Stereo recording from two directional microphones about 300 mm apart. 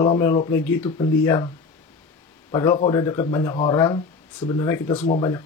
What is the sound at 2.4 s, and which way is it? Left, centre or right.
Speech, centre.